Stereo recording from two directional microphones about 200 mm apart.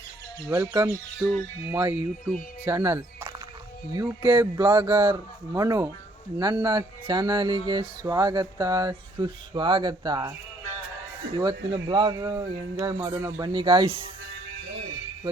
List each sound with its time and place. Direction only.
0.4 s speech: 15° right (ahead or behind)
11.3 s speech: 20° right (ahead or behind)